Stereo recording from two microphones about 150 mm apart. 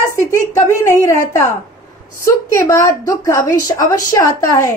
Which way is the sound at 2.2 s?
20° left (ahead or behind).